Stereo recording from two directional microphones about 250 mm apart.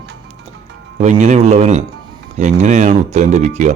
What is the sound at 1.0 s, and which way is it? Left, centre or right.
Speech, right.